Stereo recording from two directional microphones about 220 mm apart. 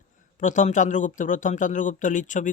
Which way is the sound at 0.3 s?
35° left (ahead or behind).